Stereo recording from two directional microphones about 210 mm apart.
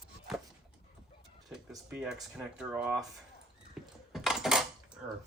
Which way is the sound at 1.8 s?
5° right (ahead or behind).